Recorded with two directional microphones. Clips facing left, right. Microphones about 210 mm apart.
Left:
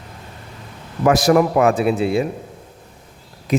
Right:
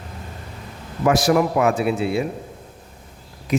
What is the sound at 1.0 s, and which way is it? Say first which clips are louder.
Speech: left 3 dB; 45° left (ahead or behind).